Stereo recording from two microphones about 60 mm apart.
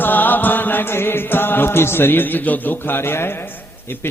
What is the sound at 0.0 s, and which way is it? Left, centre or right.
Chant, left.